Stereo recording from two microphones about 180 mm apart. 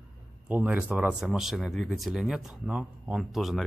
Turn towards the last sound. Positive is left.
turn(degrees=0)  # may be behind; listen again after turning